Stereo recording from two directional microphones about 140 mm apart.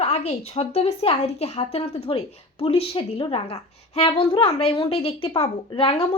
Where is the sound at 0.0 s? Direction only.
50° left (ahead or behind).